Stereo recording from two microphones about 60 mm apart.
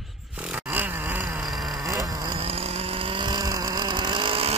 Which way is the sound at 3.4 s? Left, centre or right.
Right.